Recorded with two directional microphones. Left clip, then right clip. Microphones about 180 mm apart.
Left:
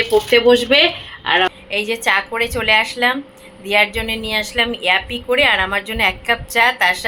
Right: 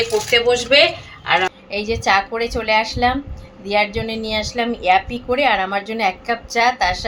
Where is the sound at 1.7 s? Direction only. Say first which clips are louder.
Right 2 dB; centre (ahead or behind).